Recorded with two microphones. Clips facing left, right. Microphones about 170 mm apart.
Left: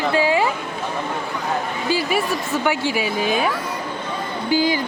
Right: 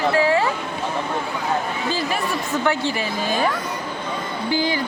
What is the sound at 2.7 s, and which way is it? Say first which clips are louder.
Speech: left 2 dB; 10° left (ahead or behind).